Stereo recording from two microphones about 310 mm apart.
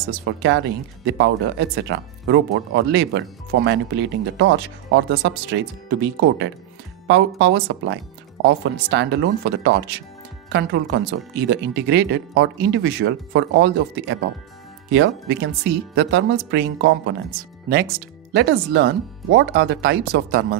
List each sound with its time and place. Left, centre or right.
0.2 s speech: right